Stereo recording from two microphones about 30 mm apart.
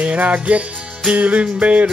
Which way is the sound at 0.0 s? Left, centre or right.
Right.